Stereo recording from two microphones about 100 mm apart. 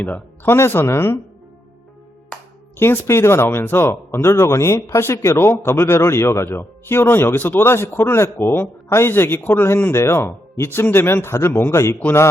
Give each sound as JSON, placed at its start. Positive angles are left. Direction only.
{"t": 0.4, "sound": "speech", "side_deg": 25}
{"t": 2.7, "sound": "speech", "side_deg": 25}